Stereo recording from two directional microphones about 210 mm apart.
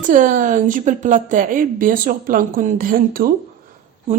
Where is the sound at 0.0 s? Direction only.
40° right (ahead or behind).